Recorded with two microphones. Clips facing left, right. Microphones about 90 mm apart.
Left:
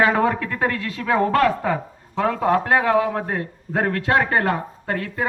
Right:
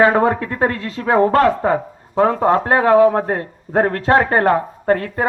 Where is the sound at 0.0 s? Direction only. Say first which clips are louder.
Right 5 dB; 30° right (ahead or behind).